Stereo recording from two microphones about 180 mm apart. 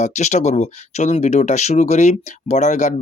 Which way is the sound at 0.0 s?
40° left (ahead or behind).